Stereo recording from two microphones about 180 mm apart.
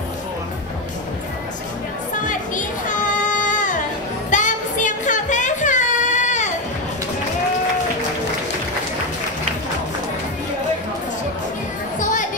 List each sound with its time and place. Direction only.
2.1 s music: 45° left (ahead or behind)
4.3 s a sound: 45° left (ahead or behind)
12.0 s music: 45° left (ahead or behind)